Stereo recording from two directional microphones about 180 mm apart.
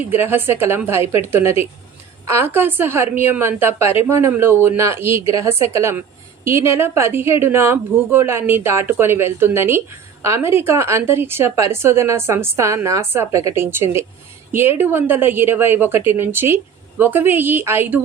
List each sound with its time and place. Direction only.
0.1 s a woman's voice: 10° right (ahead or behind)